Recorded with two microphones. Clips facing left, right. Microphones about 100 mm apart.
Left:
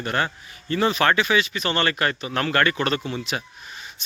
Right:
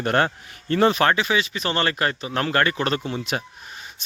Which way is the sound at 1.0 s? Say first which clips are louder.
Even; 25° right (ahead or behind).